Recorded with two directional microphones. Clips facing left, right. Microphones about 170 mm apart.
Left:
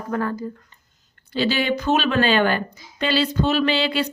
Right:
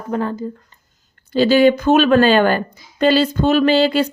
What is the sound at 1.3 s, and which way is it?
A woman's voice, 45° right (ahead or behind).